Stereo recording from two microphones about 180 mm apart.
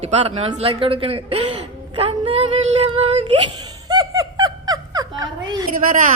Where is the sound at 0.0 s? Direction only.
30° right (ahead or behind).